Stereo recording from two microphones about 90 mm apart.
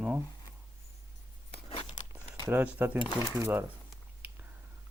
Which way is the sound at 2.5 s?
20° right (ahead or behind).